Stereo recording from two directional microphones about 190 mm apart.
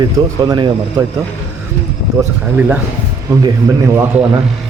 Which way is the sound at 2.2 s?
10° right (ahead or behind).